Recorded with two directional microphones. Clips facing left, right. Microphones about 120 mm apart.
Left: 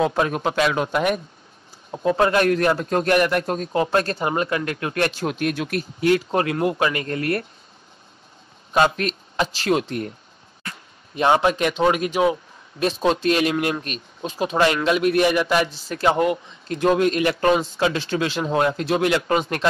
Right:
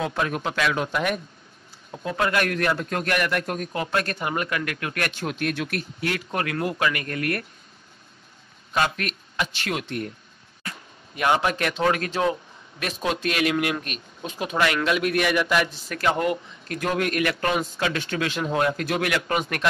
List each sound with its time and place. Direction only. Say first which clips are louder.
0.0 s a man's voice: left 5 dB; 30° left (ahead or behind)
8.7 s speech: left 6 dB; 30° left (ahead or behind)
11.1 s a man's voice: left 4 dB; 25° left (ahead or behind)
12.7 s a man's voice: left 7 dB; 30° left (ahead or behind)